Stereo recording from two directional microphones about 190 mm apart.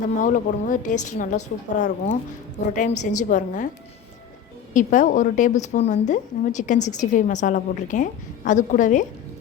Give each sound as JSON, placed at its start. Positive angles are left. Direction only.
{"t": 0.2, "sound": "a woman's voice", "side_deg": 40}
{"t": 4.7, "sound": "a woman's voice", "side_deg": 40}